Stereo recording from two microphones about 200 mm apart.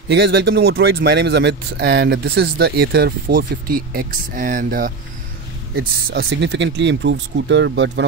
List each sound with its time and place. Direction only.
0.1 s speech: 60° right (ahead or behind)